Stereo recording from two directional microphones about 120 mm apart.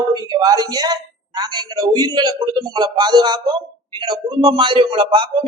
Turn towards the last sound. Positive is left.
turn(degrees=-45)  # may be behind; listen again after turning